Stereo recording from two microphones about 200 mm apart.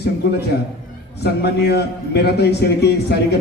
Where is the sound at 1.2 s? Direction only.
55° left (ahead or behind).